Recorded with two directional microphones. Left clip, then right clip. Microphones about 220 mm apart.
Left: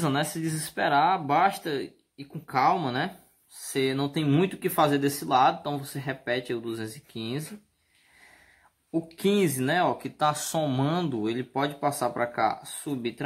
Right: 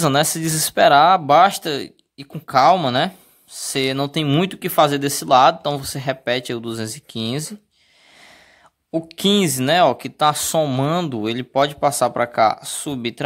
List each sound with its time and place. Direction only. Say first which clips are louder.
0.0 s speech: right 10 dB; 45° right (ahead or behind)
8.9 s speech: right 7 dB; 40° right (ahead or behind)